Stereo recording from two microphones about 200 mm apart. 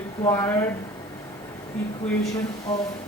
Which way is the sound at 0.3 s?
15° left (ahead or behind).